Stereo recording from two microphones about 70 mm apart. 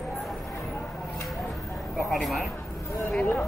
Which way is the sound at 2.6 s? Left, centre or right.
Left.